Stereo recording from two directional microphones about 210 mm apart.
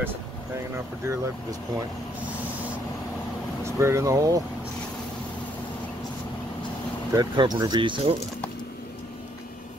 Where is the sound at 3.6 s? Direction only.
15° right (ahead or behind).